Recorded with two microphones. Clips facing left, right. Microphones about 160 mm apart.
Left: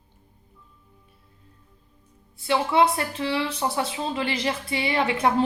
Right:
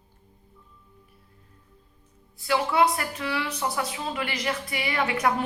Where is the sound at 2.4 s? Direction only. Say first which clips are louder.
Left 2 dB; 25° left (ahead or behind).